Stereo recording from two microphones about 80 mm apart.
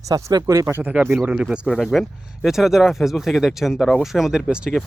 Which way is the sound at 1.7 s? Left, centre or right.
Centre.